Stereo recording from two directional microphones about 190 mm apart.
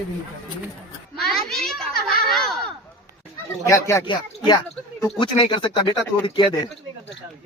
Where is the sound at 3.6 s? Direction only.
15° left (ahead or behind).